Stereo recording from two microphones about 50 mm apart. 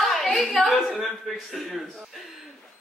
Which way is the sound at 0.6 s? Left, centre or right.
Centre.